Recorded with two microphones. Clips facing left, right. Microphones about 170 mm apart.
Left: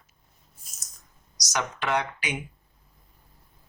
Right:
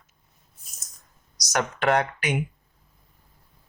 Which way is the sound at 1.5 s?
55° right (ahead or behind).